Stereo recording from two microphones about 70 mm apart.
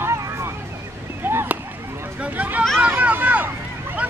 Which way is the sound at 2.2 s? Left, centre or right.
Right.